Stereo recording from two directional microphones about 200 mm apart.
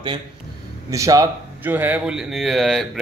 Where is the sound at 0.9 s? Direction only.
15° right (ahead or behind).